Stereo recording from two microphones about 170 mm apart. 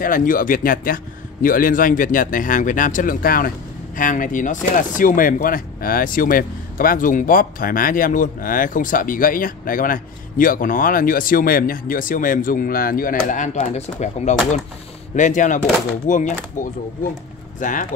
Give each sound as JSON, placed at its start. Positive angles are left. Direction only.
{"t": 0.0, "sound": "a man's voice", "side_deg": 55}